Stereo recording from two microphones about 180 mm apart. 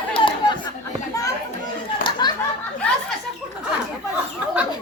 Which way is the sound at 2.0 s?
25° left (ahead or behind).